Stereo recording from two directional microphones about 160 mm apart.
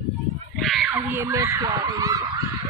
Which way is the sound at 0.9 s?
15° right (ahead or behind).